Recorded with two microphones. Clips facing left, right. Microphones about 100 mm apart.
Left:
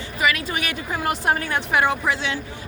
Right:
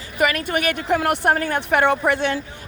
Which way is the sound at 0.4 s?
55° right (ahead or behind).